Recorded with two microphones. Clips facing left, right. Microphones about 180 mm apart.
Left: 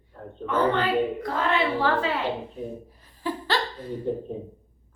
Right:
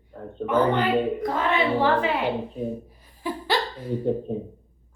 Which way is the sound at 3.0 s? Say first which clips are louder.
Left 5 dB; 15° right (ahead or behind).